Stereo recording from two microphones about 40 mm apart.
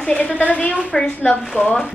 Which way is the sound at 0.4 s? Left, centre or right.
Left.